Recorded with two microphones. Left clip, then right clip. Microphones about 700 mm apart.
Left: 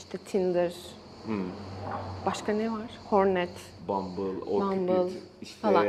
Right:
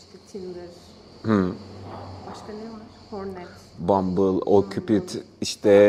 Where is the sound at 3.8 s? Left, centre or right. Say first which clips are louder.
Right 11 dB; right.